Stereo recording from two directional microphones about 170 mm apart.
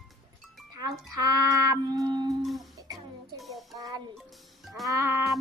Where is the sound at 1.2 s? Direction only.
20° right (ahead or behind).